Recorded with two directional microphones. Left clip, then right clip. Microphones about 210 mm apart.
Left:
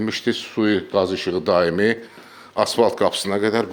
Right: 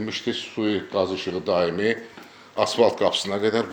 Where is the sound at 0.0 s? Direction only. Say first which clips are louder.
Left 5 dB; 50° left (ahead or behind).